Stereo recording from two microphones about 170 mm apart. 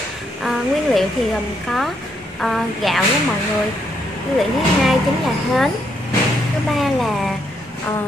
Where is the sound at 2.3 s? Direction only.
Centre (ahead or behind).